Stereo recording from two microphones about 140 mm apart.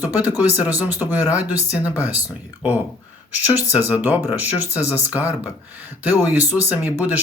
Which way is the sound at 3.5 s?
15° right (ahead or behind).